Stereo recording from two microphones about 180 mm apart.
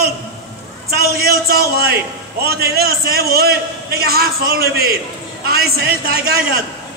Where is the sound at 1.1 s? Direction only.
60° right (ahead or behind).